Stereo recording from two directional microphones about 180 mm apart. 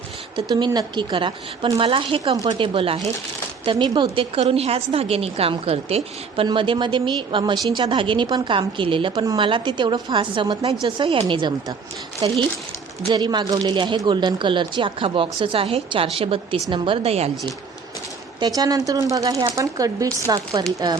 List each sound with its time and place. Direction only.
0.3 s a woman's voice: 25° right (ahead or behind)
18.3 s a woman's voice: 25° right (ahead or behind)